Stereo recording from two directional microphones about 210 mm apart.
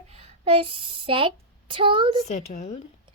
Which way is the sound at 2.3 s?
35° left (ahead or behind).